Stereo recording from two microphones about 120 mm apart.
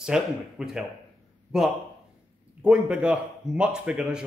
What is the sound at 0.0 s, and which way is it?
Speech, 5° right (ahead or behind).